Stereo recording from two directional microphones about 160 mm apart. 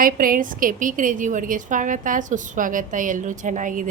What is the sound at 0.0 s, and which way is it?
Speech, 60° right (ahead or behind).